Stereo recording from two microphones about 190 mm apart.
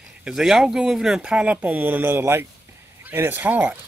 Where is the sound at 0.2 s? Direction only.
Centre (ahead or behind).